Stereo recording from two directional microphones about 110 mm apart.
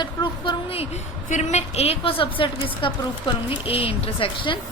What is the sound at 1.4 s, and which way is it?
A woman's voice, 85° left.